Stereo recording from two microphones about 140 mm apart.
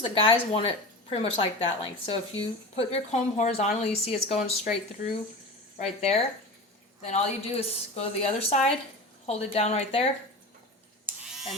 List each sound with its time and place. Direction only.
0.0 s speech: 40° left (ahead or behind)
5.8 s speech: 50° left (ahead or behind)
11.0 s a sound: centre (ahead or behind)